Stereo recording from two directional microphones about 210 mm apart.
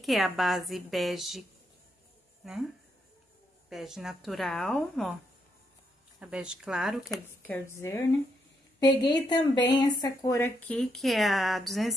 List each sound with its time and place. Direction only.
0.0 s speech: centre (ahead or behind)
3.7 s speech: centre (ahead or behind)
6.1 s speech: 5° right (ahead or behind)
7.1 s speech: 10° left (ahead or behind)
9.0 s speech: 20° left (ahead or behind); by 11.9 s centre (ahead or behind)